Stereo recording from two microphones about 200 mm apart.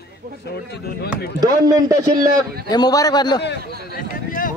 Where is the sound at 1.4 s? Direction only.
20° right (ahead or behind).